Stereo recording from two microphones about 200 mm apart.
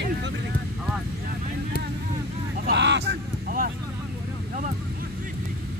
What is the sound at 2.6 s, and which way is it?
Vehicle, 60° right (ahead or behind).